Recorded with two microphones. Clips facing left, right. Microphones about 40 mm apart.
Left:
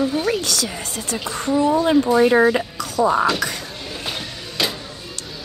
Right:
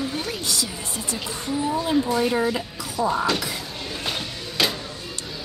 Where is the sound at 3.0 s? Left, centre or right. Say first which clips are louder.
Left 6 dB; left.